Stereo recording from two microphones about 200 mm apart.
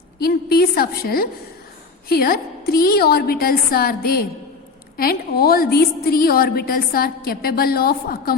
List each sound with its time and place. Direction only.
0.2 s a woman's voice: 50° left (ahead or behind)